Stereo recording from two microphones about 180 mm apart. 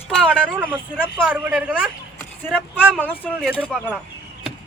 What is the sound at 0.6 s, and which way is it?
Speech, 10° right (ahead or behind).